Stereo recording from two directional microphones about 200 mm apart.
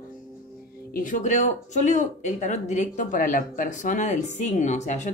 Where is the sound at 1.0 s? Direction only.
40° left (ahead or behind).